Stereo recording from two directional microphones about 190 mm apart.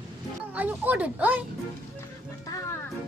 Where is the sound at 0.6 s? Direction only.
10° right (ahead or behind).